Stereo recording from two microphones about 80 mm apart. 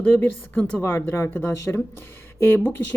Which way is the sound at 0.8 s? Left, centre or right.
Left.